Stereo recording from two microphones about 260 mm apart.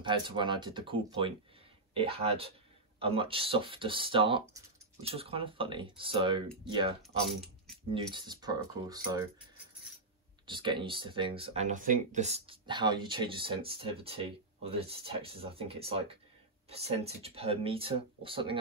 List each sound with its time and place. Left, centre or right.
0.0 s speech: centre
7.0 s speech: centre
7.9 s speech: centre
10.4 s speech: centre